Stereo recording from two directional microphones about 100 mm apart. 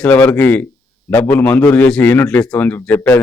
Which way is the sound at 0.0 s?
15° left (ahead or behind).